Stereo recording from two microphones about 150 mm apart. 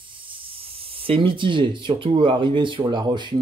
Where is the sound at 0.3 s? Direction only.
40° right (ahead or behind).